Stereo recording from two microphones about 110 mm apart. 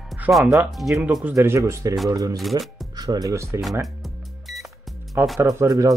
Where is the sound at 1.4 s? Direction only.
25° right (ahead or behind).